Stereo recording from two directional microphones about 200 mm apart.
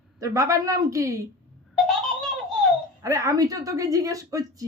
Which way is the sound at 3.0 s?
15° right (ahead or behind).